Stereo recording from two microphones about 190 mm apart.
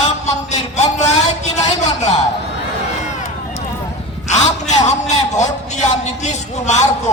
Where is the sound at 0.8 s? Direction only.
35° left (ahead or behind).